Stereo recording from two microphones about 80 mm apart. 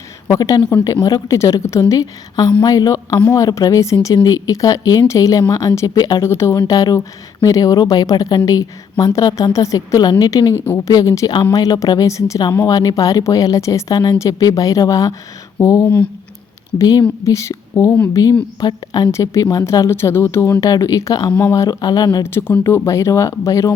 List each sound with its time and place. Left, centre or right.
0.3 s a woman's voice: left
4.0 s a woman's voice: left
6.2 s a woman's voice: left
10.0 s a woman's voice: left
19.1 s a woman's voice: left
19.9 s a woman's voice: left
22.2 s speech: left